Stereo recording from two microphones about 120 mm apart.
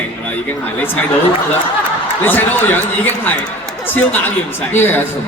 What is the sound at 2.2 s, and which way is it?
A man's voice, 15° left (ahead or behind).